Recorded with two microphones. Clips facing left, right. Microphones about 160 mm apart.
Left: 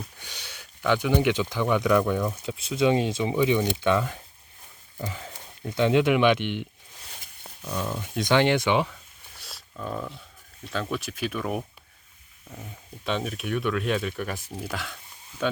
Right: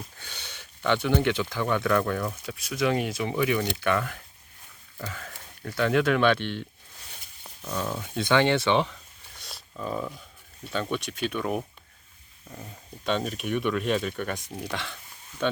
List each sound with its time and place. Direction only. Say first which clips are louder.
0.2 s speech: even; 10° left (ahead or behind)
2.5 s speech: left 4 dB; 25° left (ahead or behind)
7.6 s speech: even; 5° left (ahead or behind)
8.1 s speech: left 1 dB; 15° left (ahead or behind)